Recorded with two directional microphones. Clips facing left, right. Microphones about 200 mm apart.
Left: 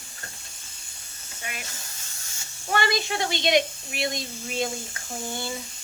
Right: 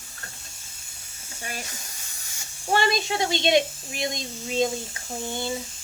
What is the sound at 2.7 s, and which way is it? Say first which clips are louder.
Speech: right 2 dB; 25° right (ahead or behind).